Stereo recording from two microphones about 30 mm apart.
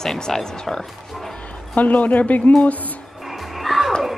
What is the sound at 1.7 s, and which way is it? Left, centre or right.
Speech, left.